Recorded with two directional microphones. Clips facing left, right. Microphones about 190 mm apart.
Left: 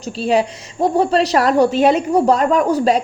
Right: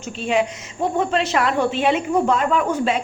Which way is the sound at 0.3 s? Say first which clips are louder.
Left 4 dB; 35° left (ahead or behind).